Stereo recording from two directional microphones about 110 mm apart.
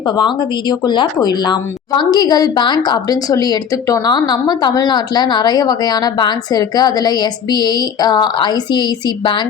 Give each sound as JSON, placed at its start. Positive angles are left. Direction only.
{"t": 0.2, "sound": "a woman's voice", "side_deg": 45}